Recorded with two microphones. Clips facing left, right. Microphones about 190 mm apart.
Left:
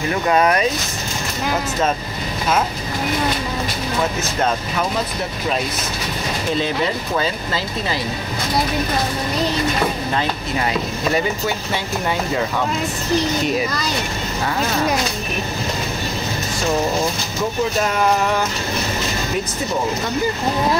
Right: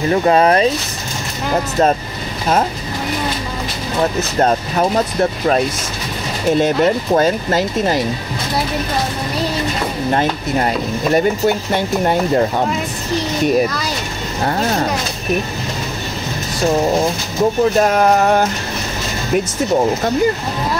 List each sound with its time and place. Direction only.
0.1 s speech: 30° right (ahead or behind)
4.4 s speech: 40° right (ahead or behind)
6.6 s speech: 45° right (ahead or behind)
11.1 s speech: 50° right (ahead or behind)
17.8 s speech: 45° right (ahead or behind)